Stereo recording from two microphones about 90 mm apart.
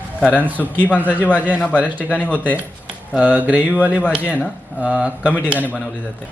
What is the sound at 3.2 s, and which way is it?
Speech, 15° right (ahead or behind).